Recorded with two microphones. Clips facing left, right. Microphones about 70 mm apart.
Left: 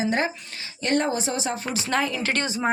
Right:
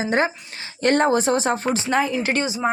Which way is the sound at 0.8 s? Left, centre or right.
Right.